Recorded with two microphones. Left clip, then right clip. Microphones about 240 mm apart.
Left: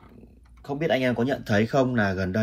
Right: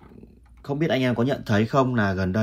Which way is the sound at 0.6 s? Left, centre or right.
Right.